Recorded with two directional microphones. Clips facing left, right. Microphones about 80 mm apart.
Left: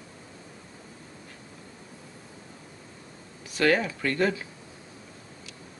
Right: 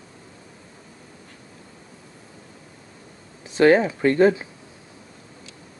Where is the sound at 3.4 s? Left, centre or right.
Right.